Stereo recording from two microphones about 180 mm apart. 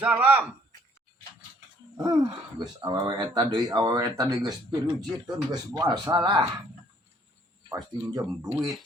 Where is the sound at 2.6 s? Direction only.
20° right (ahead or behind).